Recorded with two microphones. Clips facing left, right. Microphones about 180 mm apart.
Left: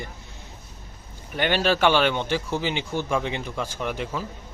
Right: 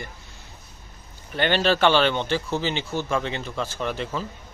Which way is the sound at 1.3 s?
10° left (ahead or behind).